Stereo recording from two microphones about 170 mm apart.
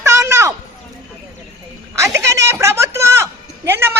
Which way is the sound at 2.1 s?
15° right (ahead or behind).